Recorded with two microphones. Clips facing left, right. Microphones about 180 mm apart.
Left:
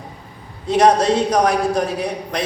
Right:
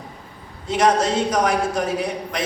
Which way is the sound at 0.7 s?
35° left (ahead or behind).